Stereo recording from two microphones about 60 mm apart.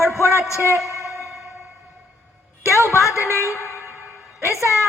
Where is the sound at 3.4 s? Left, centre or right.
Left.